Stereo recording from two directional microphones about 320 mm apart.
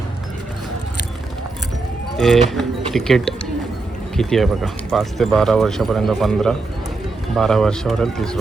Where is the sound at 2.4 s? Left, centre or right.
Centre.